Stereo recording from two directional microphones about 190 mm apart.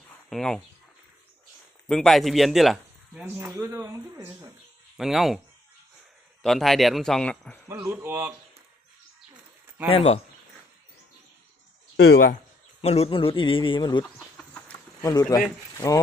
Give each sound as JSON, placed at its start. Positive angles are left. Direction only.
{"t": 0.3, "sound": "speech", "side_deg": 0}
{"t": 1.9, "sound": "speech", "side_deg": 5}
{"t": 4.9, "sound": "speech", "side_deg": 0}
{"t": 6.4, "sound": "speech", "side_deg": 0}
{"t": 7.7, "sound": "speech", "side_deg": -15}
{"t": 9.9, "sound": "speech", "side_deg": 35}
{"t": 11.9, "sound": "speech", "side_deg": 55}
{"t": 12.8, "sound": "a man's voice", "side_deg": 35}
{"t": 15.0, "sound": "a man's voice", "side_deg": 20}